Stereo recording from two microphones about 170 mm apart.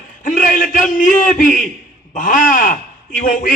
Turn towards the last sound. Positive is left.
turn(degrees=50)  # may be behind; listen again after turning